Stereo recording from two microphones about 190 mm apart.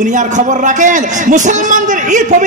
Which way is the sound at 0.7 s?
40° right (ahead or behind).